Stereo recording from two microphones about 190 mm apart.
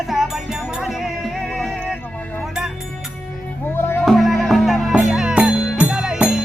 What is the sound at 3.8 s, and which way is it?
Music, 10° left (ahead or behind).